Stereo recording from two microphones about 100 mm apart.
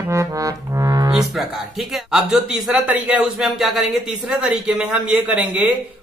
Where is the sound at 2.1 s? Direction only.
5° right (ahead or behind).